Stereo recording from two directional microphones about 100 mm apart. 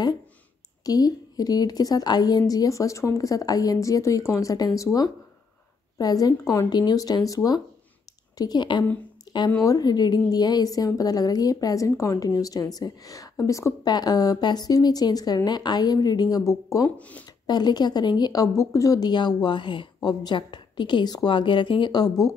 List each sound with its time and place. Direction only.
0.8 s a woman's voice: 40° left (ahead or behind)
9.2 s a sound: 50° left (ahead or behind)
9.6 s a woman's voice: 40° left (ahead or behind)
13.8 s a woman's voice: 45° left (ahead or behind)
17.5 s a woman's voice: 45° left (ahead or behind)